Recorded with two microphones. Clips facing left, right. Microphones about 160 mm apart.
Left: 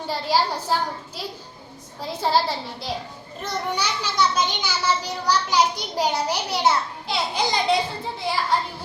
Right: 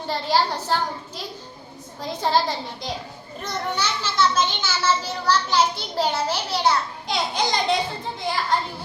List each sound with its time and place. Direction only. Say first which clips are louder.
0.1 s a child's voice: right 1 dB; 10° left (ahead or behind)
7.1 s a child's voice: even; 5° left (ahead or behind)